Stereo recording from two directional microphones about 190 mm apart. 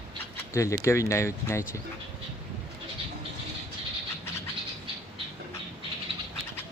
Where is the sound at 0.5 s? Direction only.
15° left (ahead or behind).